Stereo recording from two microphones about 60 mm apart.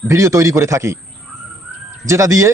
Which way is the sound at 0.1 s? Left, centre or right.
Right.